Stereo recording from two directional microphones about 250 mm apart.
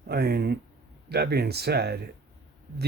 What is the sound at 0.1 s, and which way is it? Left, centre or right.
Speech, right.